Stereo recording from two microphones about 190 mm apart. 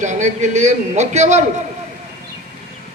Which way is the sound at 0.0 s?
40° right (ahead or behind).